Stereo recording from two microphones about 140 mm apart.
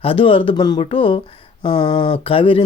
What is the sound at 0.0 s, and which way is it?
Speech, 40° left (ahead or behind).